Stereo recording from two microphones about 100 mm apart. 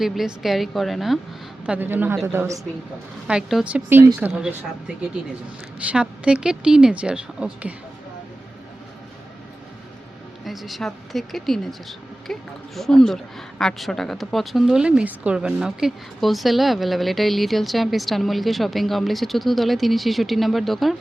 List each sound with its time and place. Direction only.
0.0 s speech: 5° right (ahead or behind)
1.6 s a man's voice: 15° right (ahead or behind)
3.2 s speech: 10° right (ahead or behind)
5.9 s speech: 10° right (ahead or behind)
10.4 s speech: centre (ahead or behind)